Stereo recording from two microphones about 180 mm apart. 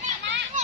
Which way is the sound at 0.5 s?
45° right (ahead or behind).